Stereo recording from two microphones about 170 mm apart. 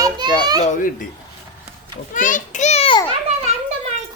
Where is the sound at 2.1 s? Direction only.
50° left (ahead or behind).